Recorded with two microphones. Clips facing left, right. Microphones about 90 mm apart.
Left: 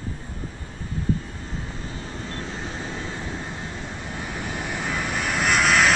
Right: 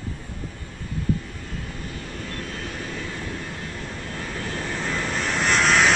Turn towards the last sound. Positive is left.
turn(degrees=5)  # may be behind; listen again after turning